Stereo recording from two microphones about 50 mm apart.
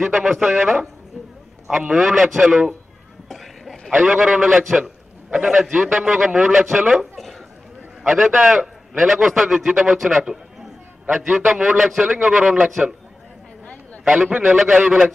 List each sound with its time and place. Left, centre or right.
0.0 s a man's voice: centre
3.3 s a sound: centre
3.9 s a man's voice: centre
6.3 s a man's voice: centre
14.0 s a man's voice: centre